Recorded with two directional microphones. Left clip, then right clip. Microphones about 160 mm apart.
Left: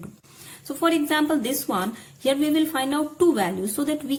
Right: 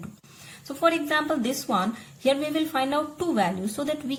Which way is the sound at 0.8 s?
25° left (ahead or behind).